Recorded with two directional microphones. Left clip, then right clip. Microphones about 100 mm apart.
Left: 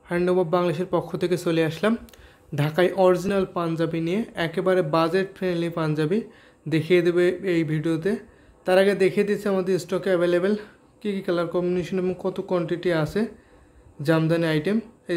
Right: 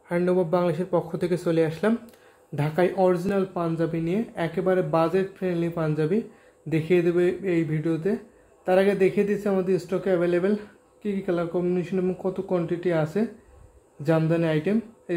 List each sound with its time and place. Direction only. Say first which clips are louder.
0.1 s speech: left 1 dB; 20° left (ahead or behind)